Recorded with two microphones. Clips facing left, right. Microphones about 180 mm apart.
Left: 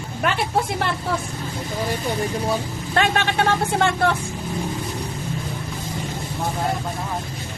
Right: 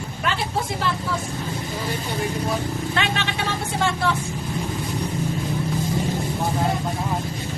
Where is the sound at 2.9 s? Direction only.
50° left (ahead or behind).